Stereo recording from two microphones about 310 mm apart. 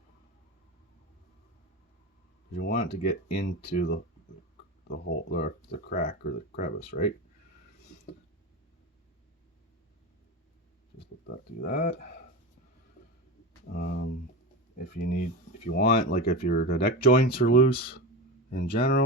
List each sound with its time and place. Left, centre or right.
2.6 s speech: left
11.0 s speech: left
13.7 s speech: left
18.8 s speech: left